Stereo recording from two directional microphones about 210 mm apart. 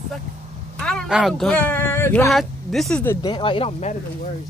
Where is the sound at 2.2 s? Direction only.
Centre (ahead or behind); by 3.9 s 30° left (ahead or behind).